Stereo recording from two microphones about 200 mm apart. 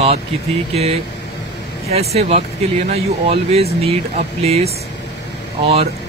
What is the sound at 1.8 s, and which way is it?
Speech, 30° right (ahead or behind).